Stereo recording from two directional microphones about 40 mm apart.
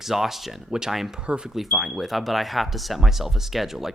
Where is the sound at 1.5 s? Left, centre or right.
Centre.